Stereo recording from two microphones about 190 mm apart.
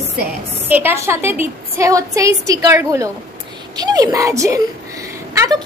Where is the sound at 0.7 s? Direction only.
10° right (ahead or behind).